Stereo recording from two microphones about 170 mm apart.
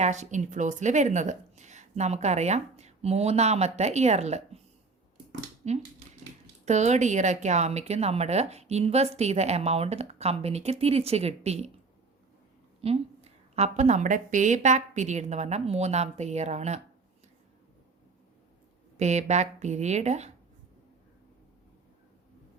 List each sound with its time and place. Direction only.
0.0 s a woman's voice: 45° right (ahead or behind)
5.6 s a woman's voice: 40° right (ahead or behind)
12.8 s a woman's voice: 40° right (ahead or behind)
18.9 s speech: 40° right (ahead or behind)